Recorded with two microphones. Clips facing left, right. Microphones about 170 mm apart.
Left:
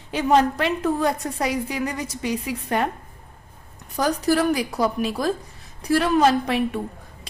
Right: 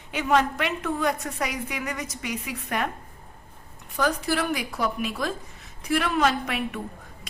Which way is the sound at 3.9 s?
40° left (ahead or behind).